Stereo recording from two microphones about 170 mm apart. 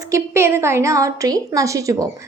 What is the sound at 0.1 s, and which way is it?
A woman's voice, 15° right (ahead or behind).